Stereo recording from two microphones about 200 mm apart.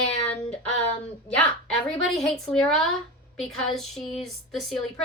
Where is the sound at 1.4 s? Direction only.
5° left (ahead or behind).